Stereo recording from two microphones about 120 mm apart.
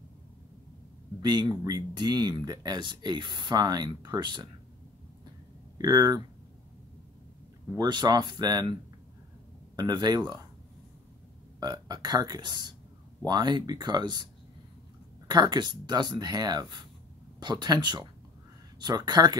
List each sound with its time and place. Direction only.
1.2 s speech: 35° right (ahead or behind)
5.8 s speech: 30° right (ahead or behind)
7.7 s speech: 35° right (ahead or behind)
9.8 s speech: 35° right (ahead or behind)
11.6 s speech: 35° right (ahead or behind)